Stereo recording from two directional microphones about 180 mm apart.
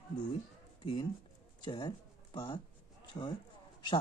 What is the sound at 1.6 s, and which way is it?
Speech, 25° left (ahead or behind).